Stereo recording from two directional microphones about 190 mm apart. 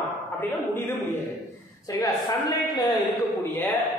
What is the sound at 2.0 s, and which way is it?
Speech, 20° left (ahead or behind).